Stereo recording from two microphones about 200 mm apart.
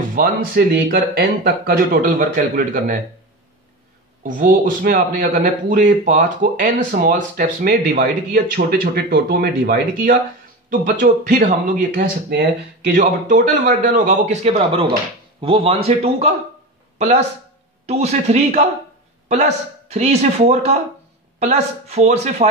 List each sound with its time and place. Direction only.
0.1 s a man's voice: 50° right (ahead or behind)
4.2 s a man's voice: 40° right (ahead or behind)
17.8 s speech: 30° right (ahead or behind)